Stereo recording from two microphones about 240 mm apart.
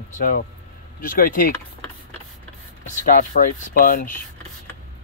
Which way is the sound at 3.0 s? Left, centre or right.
Left.